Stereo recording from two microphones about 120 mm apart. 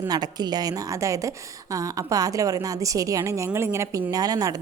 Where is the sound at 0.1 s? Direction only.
35° right (ahead or behind).